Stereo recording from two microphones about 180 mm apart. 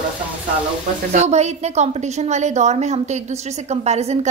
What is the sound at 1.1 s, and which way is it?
A woman's voice, 40° right (ahead or behind).